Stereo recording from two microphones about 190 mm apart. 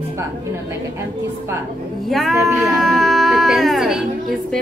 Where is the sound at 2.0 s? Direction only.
Centre (ahead or behind).